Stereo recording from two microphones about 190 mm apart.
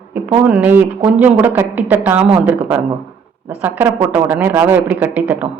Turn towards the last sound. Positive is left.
turn(degrees=-10)  # may be behind; listen again after turning